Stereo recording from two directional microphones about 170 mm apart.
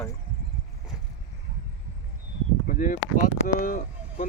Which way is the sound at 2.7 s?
50° left (ahead or behind).